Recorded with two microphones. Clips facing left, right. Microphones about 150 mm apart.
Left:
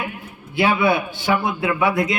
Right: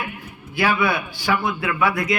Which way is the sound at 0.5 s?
25° left (ahead or behind).